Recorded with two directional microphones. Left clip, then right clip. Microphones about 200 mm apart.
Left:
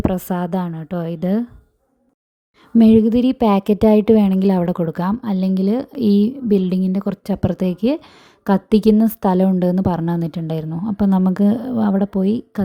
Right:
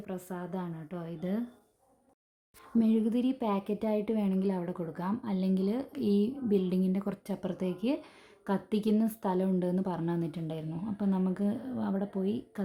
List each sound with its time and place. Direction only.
0.1 s a woman's voice: 45° left (ahead or behind)
2.7 s a woman's voice: 45° left (ahead or behind)